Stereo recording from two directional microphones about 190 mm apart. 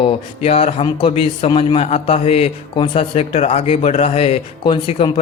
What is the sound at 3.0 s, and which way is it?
Speech, 35° left (ahead or behind).